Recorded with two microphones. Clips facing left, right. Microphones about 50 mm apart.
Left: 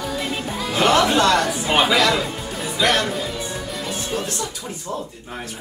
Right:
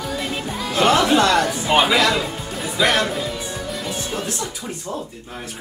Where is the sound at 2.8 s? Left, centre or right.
Right.